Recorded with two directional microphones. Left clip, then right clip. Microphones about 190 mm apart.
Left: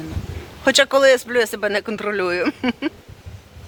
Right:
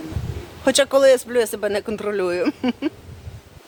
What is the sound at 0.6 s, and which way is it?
Speech, centre (ahead or behind).